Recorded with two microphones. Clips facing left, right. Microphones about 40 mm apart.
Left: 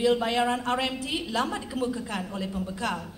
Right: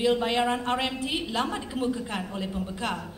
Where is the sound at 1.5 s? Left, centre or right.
Right.